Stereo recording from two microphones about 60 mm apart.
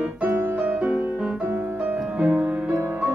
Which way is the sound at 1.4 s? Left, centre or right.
Right.